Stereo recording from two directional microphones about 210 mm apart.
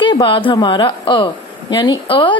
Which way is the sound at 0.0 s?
25° left (ahead or behind).